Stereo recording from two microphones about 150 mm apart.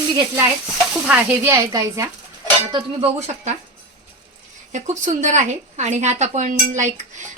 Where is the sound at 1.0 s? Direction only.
10° right (ahead or behind).